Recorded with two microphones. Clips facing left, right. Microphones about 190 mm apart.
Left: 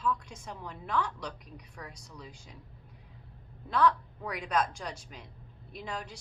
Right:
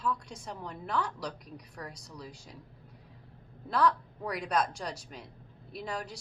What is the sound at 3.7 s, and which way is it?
A woman's voice, 35° right (ahead or behind).